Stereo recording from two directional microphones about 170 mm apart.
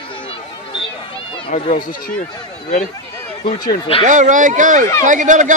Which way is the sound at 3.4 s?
25° left (ahead or behind).